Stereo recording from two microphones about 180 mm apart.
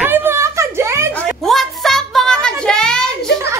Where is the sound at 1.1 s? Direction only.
Centre (ahead or behind).